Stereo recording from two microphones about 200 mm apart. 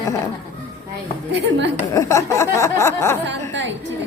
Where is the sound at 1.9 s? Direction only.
15° left (ahead or behind).